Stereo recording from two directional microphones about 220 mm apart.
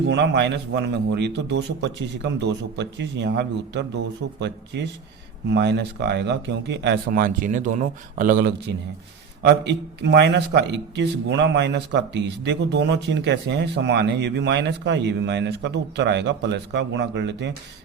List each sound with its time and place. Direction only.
0.1 s a man's voice: 55° right (ahead or behind)
9.4 s a man's voice: 50° right (ahead or behind)